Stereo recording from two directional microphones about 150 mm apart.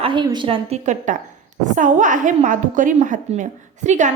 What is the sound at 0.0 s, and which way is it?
Speech, 30° right (ahead or behind).